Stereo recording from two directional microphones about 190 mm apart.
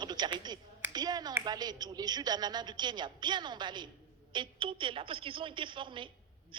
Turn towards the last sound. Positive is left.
turn(degrees=-25)  # may be behind; listen again after turning